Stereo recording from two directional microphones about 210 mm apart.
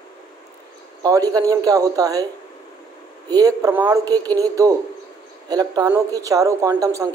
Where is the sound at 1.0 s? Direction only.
15° right (ahead or behind).